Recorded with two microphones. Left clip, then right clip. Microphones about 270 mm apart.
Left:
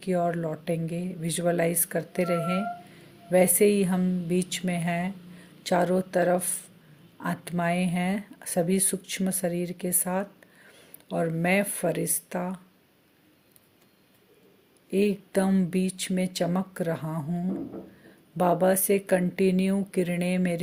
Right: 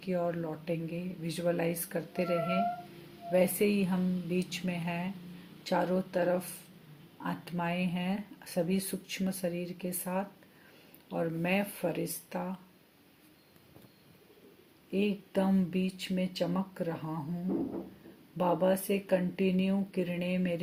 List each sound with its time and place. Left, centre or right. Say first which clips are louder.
0.0 s speech: left 6 dB; left
14.8 s speech: left 7 dB; left
18.3 s speech: left 6 dB; left